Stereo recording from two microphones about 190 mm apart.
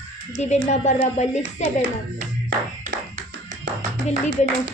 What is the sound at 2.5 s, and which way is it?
Music, 45° right (ahead or behind).